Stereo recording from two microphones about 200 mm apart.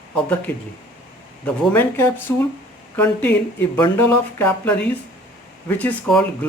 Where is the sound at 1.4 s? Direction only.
10° left (ahead or behind).